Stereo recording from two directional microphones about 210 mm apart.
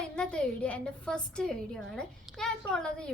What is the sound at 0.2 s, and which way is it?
A woman's voice, 5° left (ahead or behind).